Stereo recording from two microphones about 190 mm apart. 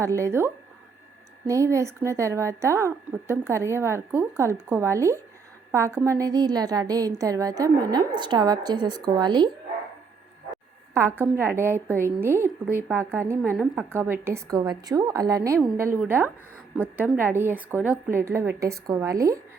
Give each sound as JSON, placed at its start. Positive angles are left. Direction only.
{"t": 0.0, "sound": "a woman's voice", "side_deg": -15}
{"t": 10.9, "sound": "speech", "side_deg": -10}